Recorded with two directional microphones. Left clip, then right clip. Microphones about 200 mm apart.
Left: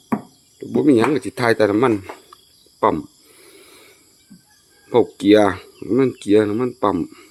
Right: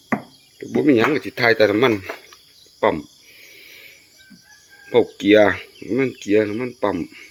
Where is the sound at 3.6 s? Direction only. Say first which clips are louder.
Right 5 dB; 20° left (ahead or behind).